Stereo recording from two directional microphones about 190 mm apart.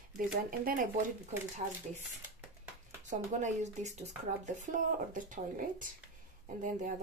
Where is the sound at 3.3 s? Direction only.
40° right (ahead or behind).